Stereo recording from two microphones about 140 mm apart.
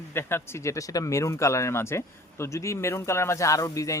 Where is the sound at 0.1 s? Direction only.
15° left (ahead or behind).